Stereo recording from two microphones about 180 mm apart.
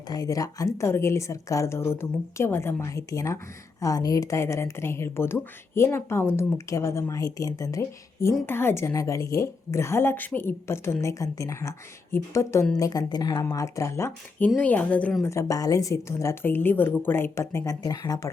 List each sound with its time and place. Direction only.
0.1 s speech: 20° left (ahead or behind)